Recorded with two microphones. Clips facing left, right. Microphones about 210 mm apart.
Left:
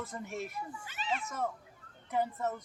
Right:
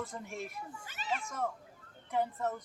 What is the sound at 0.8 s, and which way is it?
Speech, 40° right (ahead or behind).